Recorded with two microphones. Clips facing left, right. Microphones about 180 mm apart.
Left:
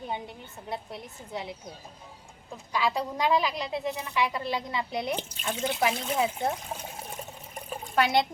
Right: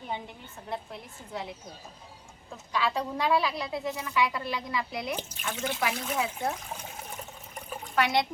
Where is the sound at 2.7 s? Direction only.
10° left (ahead or behind).